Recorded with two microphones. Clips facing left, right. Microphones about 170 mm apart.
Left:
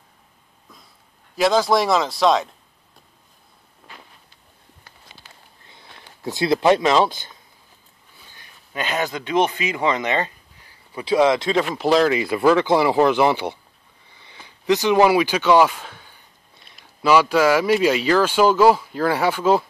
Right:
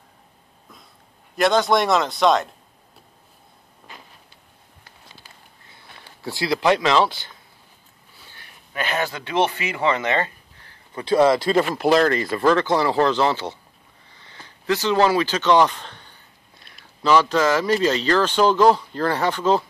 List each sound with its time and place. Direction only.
1.3 s speech: centre (ahead or behind)
6.2 s speech: 20° left (ahead or behind)
14.0 s a sound: 15° left (ahead or behind)
16.7 s speech: 10° left (ahead or behind)